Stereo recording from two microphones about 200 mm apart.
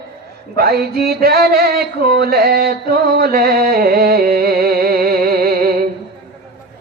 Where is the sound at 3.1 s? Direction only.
50° right (ahead or behind).